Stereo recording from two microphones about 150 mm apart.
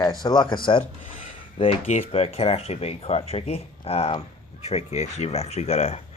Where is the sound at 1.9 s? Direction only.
45° left (ahead or behind).